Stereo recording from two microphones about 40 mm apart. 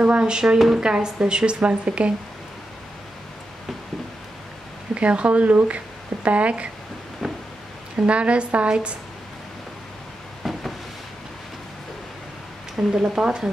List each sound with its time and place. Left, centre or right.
0.0 s a woman's voice: right
4.9 s speech: right
7.2 s a sound: centre
7.9 s a woman's voice: right
10.4 s a sound: centre
12.8 s a woman's voice: right